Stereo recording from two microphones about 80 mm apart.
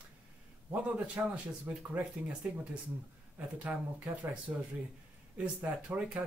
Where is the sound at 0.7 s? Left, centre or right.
Centre.